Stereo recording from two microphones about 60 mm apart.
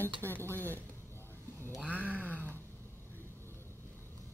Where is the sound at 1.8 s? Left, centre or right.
Left.